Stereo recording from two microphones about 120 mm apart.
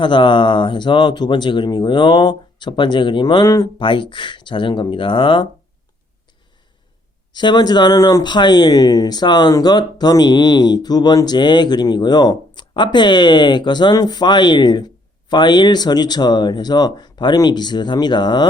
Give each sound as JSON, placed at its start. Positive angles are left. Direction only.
{"t": 0.0, "sound": "speech", "side_deg": 40}
{"t": 7.3, "sound": "speech", "side_deg": 40}